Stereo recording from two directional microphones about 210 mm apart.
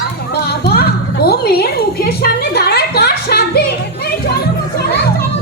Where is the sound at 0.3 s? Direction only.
50° left (ahead or behind).